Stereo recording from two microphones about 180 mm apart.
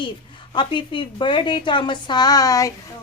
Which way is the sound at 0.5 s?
25° left (ahead or behind).